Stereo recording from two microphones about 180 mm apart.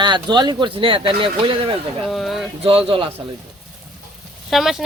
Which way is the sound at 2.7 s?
30° right (ahead or behind).